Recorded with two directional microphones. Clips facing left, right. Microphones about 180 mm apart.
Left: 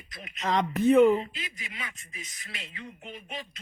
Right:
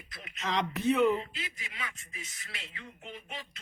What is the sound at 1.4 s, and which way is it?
Speech, 15° left (ahead or behind).